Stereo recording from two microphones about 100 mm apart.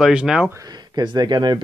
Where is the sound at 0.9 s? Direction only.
45° right (ahead or behind).